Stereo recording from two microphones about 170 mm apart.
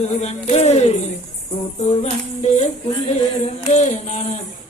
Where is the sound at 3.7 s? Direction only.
45° left (ahead or behind).